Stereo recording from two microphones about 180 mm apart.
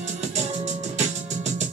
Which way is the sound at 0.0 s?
40° right (ahead or behind).